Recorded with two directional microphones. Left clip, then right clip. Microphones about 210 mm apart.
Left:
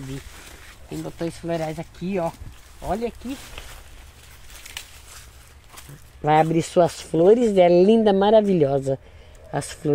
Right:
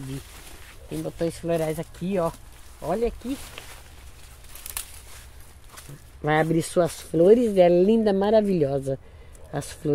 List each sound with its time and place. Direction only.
1.0 s speech: 20° right (ahead or behind)
2.9 s speech: 15° right (ahead or behind)
6.2 s speech: 10° left (ahead or behind)